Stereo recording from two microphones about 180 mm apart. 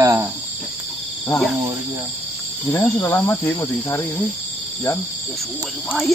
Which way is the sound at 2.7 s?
15° left (ahead or behind).